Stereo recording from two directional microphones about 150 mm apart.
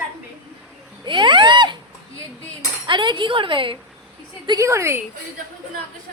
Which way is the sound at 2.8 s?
30° right (ahead or behind).